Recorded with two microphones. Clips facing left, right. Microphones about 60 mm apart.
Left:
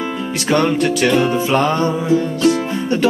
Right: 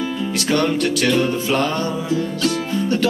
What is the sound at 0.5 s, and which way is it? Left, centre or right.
Music, centre.